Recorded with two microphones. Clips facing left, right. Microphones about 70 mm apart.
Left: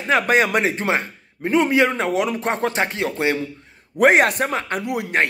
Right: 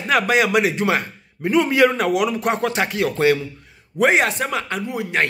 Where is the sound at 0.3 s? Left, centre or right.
Left.